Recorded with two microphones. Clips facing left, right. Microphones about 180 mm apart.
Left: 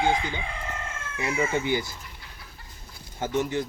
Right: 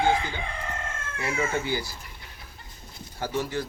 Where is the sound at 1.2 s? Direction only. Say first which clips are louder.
Left 2 dB; 20° left (ahead or behind).